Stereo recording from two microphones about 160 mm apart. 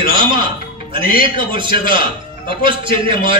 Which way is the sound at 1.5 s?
30° right (ahead or behind).